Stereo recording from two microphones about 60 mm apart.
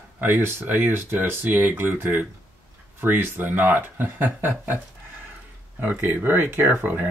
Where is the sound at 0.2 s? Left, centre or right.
Right.